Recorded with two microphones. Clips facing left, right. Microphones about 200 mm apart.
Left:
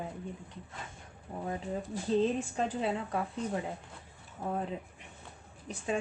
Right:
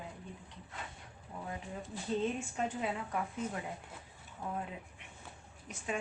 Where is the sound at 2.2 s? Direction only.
30° left (ahead or behind).